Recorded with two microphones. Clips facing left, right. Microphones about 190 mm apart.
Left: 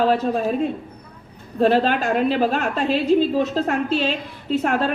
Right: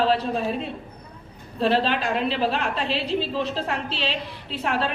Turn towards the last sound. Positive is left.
turn(degrees=45)  # may be behind; listen again after turning